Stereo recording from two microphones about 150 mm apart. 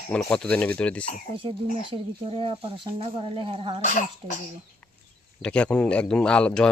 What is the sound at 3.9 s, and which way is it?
Speech, 60° left (ahead or behind).